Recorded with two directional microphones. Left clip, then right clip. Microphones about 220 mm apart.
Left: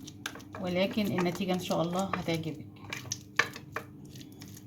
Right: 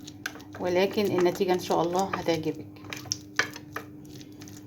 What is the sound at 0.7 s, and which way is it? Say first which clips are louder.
Speech: right 6 dB; 40° right (ahead or behind).